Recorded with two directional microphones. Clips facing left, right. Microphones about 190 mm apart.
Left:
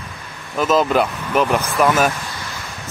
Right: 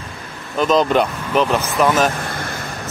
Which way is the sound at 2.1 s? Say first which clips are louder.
Right 5 dB; 55° right (ahead or behind).